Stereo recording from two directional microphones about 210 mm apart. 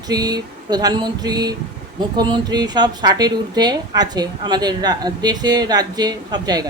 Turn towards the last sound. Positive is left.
turn(degrees=-20)  # may be behind; listen again after turning